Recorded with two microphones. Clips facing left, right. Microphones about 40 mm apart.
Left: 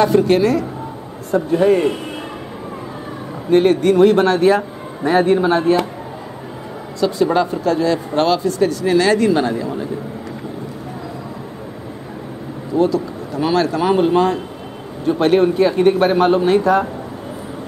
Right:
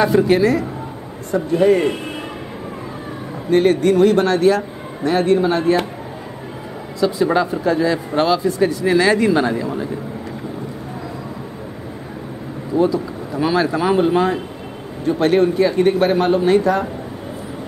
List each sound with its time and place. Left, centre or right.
0.0 s a man's voice: centre
3.4 s a man's voice: centre
7.0 s a man's voice: centre
12.7 s speech: centre
13.4 s a man's voice: centre